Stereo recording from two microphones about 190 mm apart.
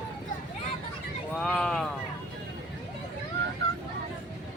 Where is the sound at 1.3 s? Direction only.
5° left (ahead or behind).